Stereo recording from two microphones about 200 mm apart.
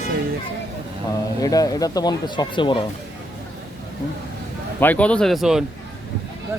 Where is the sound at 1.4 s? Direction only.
20° left (ahead or behind).